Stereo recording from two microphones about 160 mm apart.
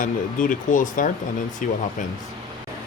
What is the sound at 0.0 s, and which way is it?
Speech, 55° left (ahead or behind).